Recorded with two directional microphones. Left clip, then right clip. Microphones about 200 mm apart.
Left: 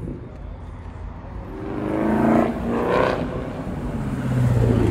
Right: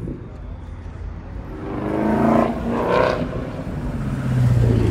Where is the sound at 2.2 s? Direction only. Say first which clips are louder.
Right 2 dB; 15° right (ahead or behind).